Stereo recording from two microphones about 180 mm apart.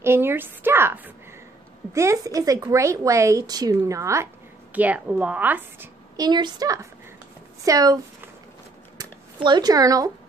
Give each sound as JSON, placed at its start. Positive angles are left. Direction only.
{"t": 0.0, "sound": "speech", "side_deg": -15}
{"t": 6.2, "sound": "speech", "side_deg": -25}
{"t": 8.9, "sound": "a sound", "side_deg": -25}